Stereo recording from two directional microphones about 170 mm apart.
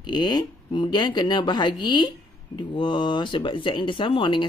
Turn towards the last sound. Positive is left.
turn(degrees=30)  # may be behind; listen again after turning